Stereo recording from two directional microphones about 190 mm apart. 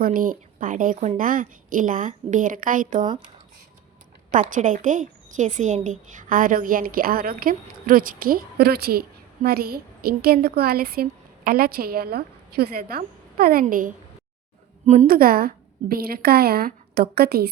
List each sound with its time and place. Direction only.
0.0 s a woman's voice: 45° right (ahead or behind)
4.3 s a woman's voice: 45° right (ahead or behind)
15.0 s a woman's voice: 50° right (ahead or behind)